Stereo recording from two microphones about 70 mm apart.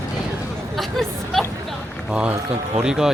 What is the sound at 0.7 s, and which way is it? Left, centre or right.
Hubbub, centre.